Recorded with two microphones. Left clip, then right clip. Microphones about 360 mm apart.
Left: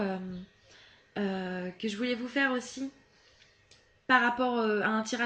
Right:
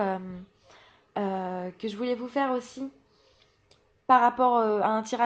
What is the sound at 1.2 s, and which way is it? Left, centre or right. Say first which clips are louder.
Speech: right 4 dB; centre.